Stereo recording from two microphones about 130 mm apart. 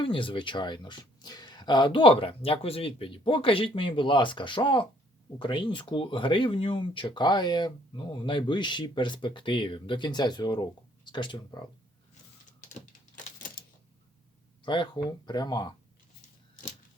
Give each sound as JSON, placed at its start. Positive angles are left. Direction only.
{"t": 0.0, "sound": "speech", "side_deg": 40}
{"t": 12.6, "sound": "typewriter", "side_deg": 90}
{"t": 14.6, "sound": "speech", "side_deg": 40}